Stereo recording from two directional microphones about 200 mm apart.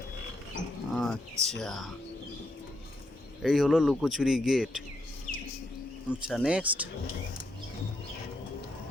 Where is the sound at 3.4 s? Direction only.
Centre (ahead or behind).